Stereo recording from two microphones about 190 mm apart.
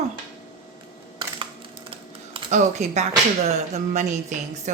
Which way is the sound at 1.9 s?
25° right (ahead or behind).